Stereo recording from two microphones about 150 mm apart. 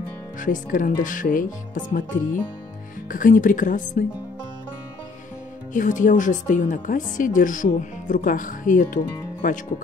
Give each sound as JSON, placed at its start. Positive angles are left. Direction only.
{"t": 0.4, "sound": "a woman's voice", "side_deg": 60}
{"t": 3.1, "sound": "a woman's voice", "side_deg": 60}
{"t": 5.7, "sound": "a woman's voice", "side_deg": 60}